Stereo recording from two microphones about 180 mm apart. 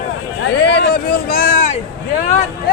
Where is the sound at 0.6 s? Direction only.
70° left (ahead or behind); by 1.7 s 50° left (ahead or behind).